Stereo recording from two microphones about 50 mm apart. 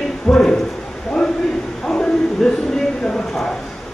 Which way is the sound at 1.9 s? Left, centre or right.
Centre.